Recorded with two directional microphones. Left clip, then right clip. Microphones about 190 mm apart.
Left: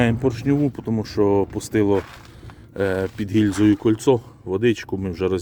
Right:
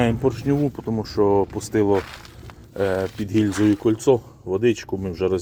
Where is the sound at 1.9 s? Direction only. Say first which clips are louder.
Even; 45° right (ahead or behind).